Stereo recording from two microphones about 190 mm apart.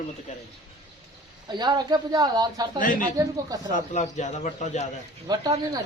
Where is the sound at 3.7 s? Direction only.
40° left (ahead or behind).